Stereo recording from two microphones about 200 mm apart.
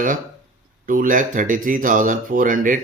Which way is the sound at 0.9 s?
40° right (ahead or behind).